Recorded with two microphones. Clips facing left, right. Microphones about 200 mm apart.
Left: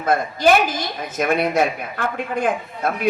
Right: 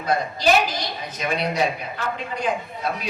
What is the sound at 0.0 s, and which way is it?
A woman's voice, 50° left (ahead or behind).